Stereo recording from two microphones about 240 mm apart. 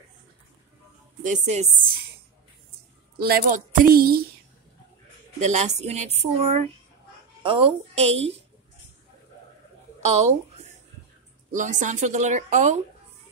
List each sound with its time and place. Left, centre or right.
1.2 s a woman's voice: right
3.2 s a woman's voice: right
5.4 s a woman's voice: right
10.0 s a woman's voice: right